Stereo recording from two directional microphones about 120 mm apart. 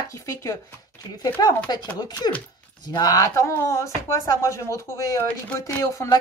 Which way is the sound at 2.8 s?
35° left (ahead or behind).